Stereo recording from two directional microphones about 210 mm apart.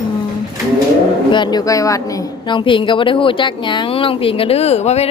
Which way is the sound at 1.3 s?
20° left (ahead or behind).